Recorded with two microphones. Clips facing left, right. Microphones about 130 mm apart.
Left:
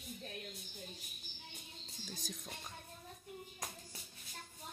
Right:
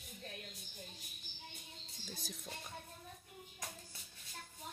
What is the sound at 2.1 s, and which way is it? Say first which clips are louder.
Speech: left 1 dB; 5° right (ahead or behind).